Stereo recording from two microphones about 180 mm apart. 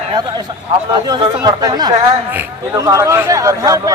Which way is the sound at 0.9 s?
25° right (ahead or behind).